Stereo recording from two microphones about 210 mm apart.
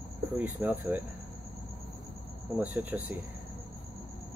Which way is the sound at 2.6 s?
5° right (ahead or behind).